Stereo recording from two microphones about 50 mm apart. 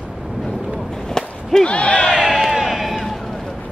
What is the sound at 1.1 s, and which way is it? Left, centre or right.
Whip, centre.